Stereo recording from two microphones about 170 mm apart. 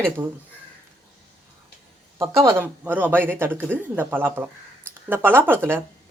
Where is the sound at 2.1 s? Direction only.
15° right (ahead or behind).